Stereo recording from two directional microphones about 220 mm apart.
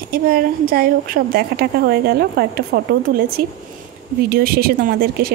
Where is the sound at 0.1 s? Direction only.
40° right (ahead or behind).